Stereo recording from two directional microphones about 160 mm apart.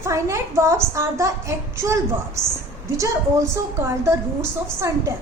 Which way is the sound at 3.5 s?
15° right (ahead or behind).